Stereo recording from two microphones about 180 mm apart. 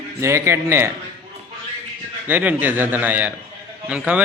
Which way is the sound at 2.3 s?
10° right (ahead or behind).